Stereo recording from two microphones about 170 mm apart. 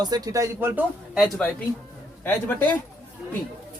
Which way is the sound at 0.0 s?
20° right (ahead or behind).